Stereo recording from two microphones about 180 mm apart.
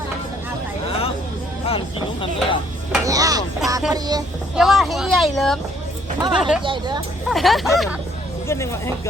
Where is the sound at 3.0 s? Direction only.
20° right (ahead or behind).